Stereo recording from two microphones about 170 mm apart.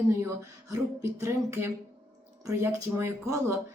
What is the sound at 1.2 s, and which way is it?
A woman's voice, 15° right (ahead or behind).